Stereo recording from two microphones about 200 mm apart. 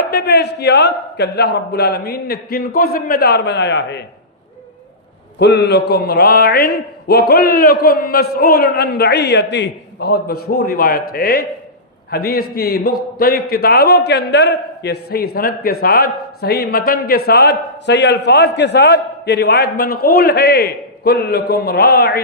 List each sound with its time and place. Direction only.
0.1 s a man's voice: 55° left (ahead or behind)
5.4 s mantra: 60° left (ahead or behind)
7.1 s a man's voice: 50° left (ahead or behind)